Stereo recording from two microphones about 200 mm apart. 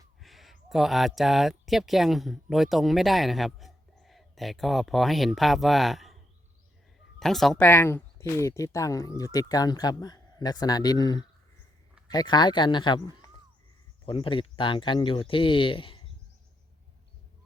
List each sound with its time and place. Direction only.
0.2 s speech: centre (ahead or behind)
7.2 s speech: centre (ahead or behind); by 16.0 s 25° left (ahead or behind)